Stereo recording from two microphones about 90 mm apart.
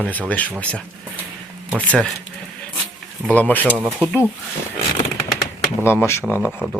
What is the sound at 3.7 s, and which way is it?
Speech, 15° right (ahead or behind).